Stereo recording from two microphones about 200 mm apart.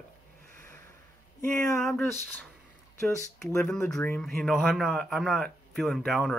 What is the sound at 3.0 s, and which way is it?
A man's voice, 15° left (ahead or behind).